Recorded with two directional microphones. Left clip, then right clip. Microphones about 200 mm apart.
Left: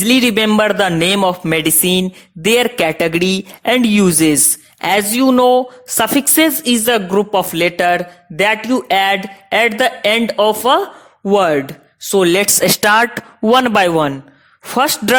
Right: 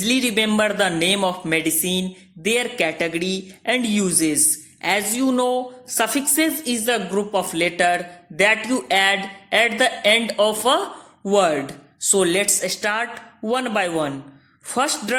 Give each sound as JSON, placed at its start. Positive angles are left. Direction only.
{"t": 0.0, "sound": "a man's voice", "side_deg": 40}